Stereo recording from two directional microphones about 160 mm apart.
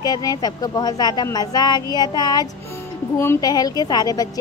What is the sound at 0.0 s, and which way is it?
A woman's voice, 25° left (ahead or behind).